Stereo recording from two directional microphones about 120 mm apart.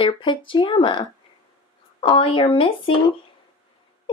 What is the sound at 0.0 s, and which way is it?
Speech, 45° left (ahead or behind).